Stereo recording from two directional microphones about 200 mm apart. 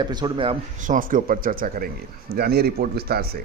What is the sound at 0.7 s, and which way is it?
A man's voice, 40° right (ahead or behind).